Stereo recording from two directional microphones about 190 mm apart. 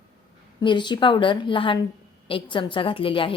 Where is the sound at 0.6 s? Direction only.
25° left (ahead or behind).